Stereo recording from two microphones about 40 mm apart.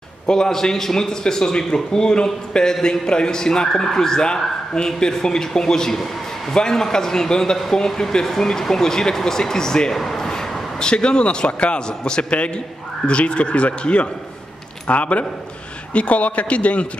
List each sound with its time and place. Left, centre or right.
0.3 s a man's voice: centre; by 16.8 s left